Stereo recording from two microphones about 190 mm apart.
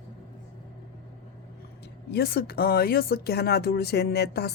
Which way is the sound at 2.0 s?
55° left (ahead or behind).